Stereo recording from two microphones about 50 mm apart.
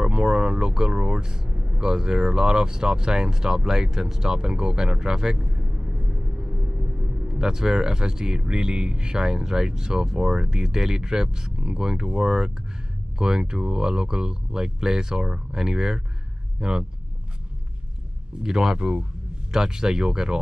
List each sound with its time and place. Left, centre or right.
0.0 s speech: centre
7.3 s speech: centre
18.4 s speech: centre
18.8 s speech: right